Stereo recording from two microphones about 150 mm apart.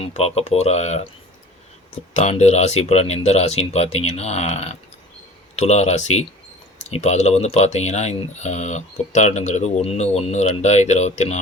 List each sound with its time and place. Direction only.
0.0 s speech: 45° left (ahead or behind)
2.1 s speech: 45° left (ahead or behind)